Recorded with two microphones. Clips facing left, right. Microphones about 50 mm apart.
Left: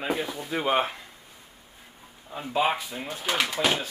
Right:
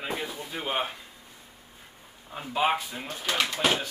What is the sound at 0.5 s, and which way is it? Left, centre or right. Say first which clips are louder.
Speech: left 7 dB; left.